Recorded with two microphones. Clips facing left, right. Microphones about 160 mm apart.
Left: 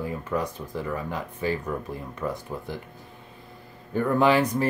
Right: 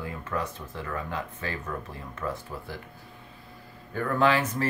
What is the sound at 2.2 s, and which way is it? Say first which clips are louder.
Speech: left 2 dB; 15° left (ahead or behind).